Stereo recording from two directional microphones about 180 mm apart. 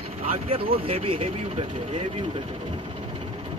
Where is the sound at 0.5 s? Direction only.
30° right (ahead or behind).